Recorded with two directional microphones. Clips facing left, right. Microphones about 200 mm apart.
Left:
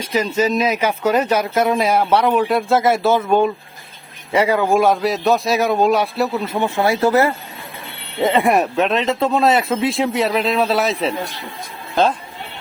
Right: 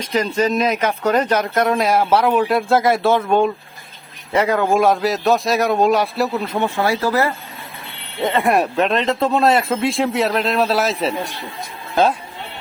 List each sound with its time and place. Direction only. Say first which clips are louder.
0.0 s speech: even; 5° left (ahead or behind)
6.6 s speech: left 3 dB; 15° left (ahead or behind)
8.4 s speech: left 1 dB; centre (ahead or behind)